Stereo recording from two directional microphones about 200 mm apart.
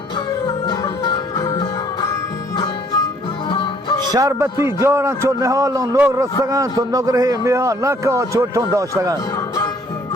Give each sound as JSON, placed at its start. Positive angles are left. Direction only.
{"t": 0.7, "sound": "music", "side_deg": 20}
{"t": 3.5, "sound": "music", "side_deg": 25}
{"t": 4.1, "sound": "a man's voice", "side_deg": -15}